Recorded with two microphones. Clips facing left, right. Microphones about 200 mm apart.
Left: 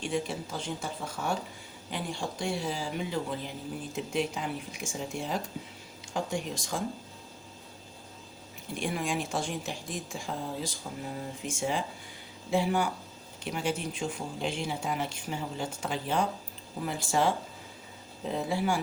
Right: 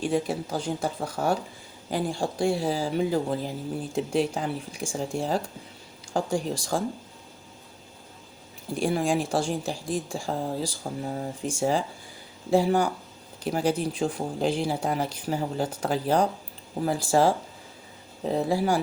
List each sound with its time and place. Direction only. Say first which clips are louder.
0.0 s speech: right 6 dB; 40° right (ahead or behind)
8.7 s speech: right 7 dB; 35° right (ahead or behind)